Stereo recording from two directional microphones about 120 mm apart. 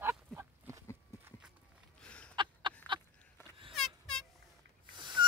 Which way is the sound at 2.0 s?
10° left (ahead or behind).